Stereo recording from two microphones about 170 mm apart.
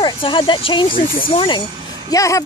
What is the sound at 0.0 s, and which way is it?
Speech, 30° left (ahead or behind).